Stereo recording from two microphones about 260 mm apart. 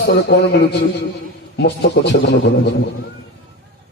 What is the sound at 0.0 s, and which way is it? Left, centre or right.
Speech, left.